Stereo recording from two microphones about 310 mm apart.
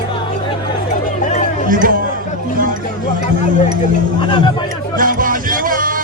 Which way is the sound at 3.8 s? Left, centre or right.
Centre.